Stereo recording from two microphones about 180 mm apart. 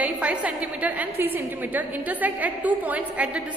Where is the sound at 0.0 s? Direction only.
5° right (ahead or behind).